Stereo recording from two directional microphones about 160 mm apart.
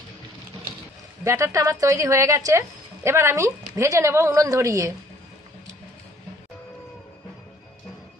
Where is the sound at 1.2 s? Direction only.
20° right (ahead or behind).